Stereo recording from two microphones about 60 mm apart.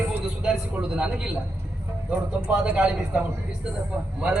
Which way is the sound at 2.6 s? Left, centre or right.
Centre.